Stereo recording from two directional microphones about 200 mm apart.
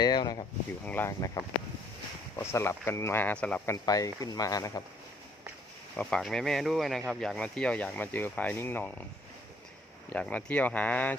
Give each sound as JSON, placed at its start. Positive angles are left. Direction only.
{"t": 0.0, "sound": "a sound", "side_deg": 20}
{"t": 0.9, "sound": "speech", "side_deg": 10}
{"t": 2.4, "sound": "speech", "side_deg": 15}
{"t": 3.8, "sound": "speech", "side_deg": 15}
{"t": 6.0, "sound": "speech", "side_deg": 5}
{"t": 10.1, "sound": "speech", "side_deg": 5}